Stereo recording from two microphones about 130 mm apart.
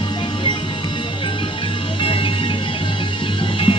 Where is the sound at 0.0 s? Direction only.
40° left (ahead or behind).